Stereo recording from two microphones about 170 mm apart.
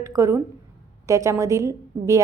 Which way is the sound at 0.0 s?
20° right (ahead or behind).